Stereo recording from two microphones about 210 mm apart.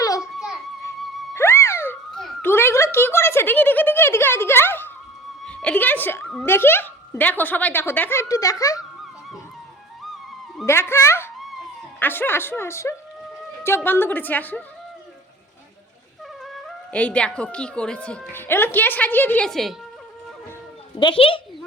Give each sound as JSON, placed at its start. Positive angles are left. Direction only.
{"t": 0.2, "sound": "music", "side_deg": -5}
{"t": 1.3, "sound": "a sound", "side_deg": 10}
{"t": 5.5, "sound": "a woman's voice", "side_deg": 5}
{"t": 10.7, "sound": "a woman's voice", "side_deg": 10}
{"t": 16.4, "sound": "speech", "side_deg": 0}
{"t": 21.0, "sound": "a child's voice", "side_deg": 25}